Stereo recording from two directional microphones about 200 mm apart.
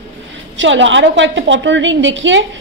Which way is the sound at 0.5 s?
70° right (ahead or behind).